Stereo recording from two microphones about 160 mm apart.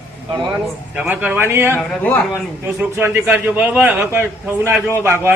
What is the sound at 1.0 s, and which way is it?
Speech, 10° right (ahead or behind).